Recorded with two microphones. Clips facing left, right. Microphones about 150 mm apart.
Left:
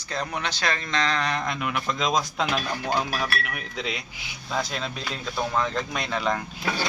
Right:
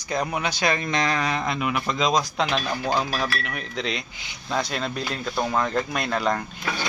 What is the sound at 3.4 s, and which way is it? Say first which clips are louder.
Speech: right 3 dB; 5° left (ahead or behind).